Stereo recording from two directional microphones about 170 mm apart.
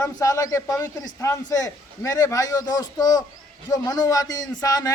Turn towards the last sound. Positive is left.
turn(degrees=20)  # may be behind; listen again after turning